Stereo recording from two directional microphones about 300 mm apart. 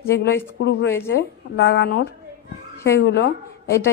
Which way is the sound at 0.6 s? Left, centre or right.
Left.